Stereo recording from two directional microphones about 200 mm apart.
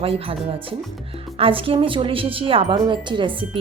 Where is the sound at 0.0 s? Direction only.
30° right (ahead or behind).